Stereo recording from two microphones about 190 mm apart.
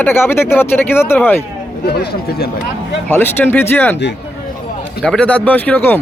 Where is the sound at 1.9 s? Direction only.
55° left (ahead or behind).